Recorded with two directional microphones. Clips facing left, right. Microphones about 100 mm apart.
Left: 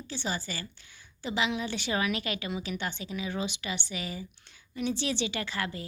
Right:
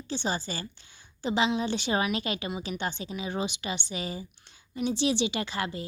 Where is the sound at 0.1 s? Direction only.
25° right (ahead or behind).